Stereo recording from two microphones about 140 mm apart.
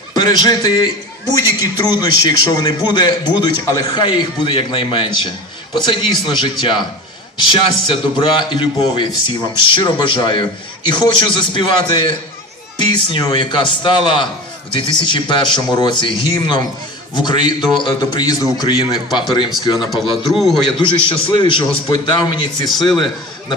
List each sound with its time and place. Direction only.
0.1 s a man's voice: 30° left (ahead or behind)
20.2 s a man's voice: centre (ahead or behind)
20.7 s a man's voice: 35° left (ahead or behind)
22.7 s a man's voice: centre (ahead or behind)